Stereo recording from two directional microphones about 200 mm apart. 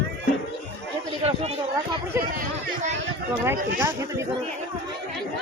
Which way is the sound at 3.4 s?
10° right (ahead or behind).